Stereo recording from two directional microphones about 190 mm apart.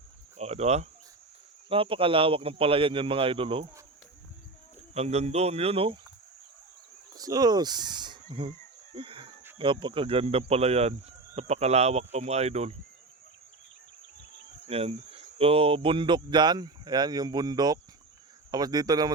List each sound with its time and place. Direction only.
0.3 s speech: 35° right (ahead or behind)
4.9 s speech: 35° right (ahead or behind)
7.2 s speech: 20° right (ahead or behind)
9.0 s chicken: 30° right (ahead or behind)
9.6 s speech: 25° right (ahead or behind)
14.7 s speech: 30° right (ahead or behind)